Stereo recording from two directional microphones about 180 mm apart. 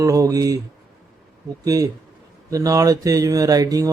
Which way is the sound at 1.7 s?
20° right (ahead or behind).